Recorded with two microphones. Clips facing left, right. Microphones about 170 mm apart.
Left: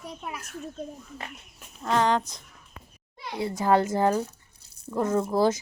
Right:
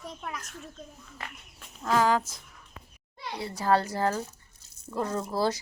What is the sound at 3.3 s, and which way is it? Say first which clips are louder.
A woman's voice: left 3 dB; 20° left (ahead or behind).